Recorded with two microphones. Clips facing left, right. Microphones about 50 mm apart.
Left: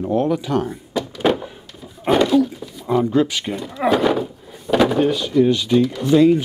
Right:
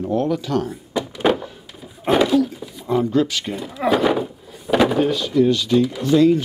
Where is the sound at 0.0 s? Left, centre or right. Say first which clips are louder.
Left 2 dB; left.